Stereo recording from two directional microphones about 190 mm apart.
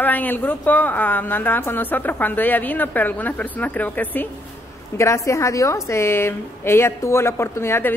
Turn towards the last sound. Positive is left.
turn(degrees=15)  # may be behind; listen again after turning